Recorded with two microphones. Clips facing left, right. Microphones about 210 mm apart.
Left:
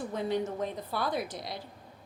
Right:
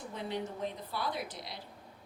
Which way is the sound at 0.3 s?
45° left (ahead or behind).